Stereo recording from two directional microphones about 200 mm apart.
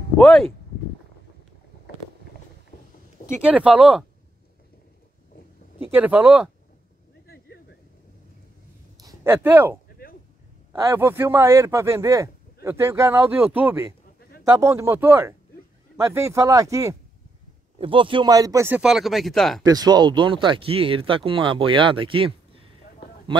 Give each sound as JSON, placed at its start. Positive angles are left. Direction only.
{"t": 0.2, "sound": "speech", "side_deg": 0}
{"t": 3.3, "sound": "speech", "side_deg": -5}
{"t": 5.8, "sound": "speech", "side_deg": -5}
{"t": 7.2, "sound": "a sound", "side_deg": 55}
{"t": 9.0, "sound": "speech", "side_deg": -10}
{"t": 19.6, "sound": "speech", "side_deg": -20}